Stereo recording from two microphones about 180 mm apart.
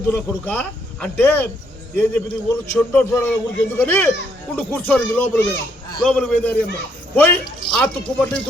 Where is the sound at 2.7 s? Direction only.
10° left (ahead or behind).